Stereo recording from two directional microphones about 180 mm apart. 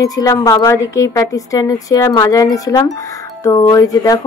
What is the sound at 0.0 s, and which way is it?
A woman's voice, 20° left (ahead or behind).